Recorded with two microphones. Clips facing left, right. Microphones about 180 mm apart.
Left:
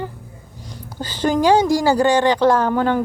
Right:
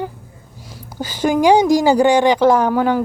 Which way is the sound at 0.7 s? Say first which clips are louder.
Right 2 dB; 10° right (ahead or behind).